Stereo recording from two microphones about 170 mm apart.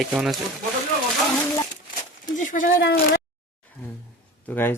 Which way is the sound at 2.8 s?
70° left (ahead or behind).